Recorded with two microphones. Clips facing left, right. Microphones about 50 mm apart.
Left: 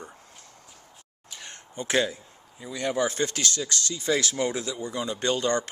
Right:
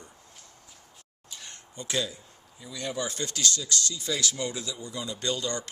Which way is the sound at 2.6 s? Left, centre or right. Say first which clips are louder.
Left 6 dB; left.